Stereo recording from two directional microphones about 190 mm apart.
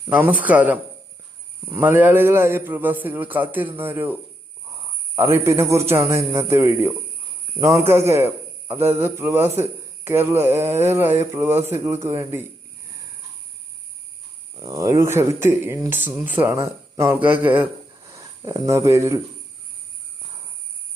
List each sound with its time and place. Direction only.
0.1 s speech: 10° right (ahead or behind)
14.5 s speech: 15° right (ahead or behind)